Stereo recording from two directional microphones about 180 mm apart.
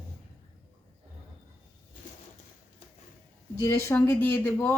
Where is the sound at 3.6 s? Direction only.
10° left (ahead or behind).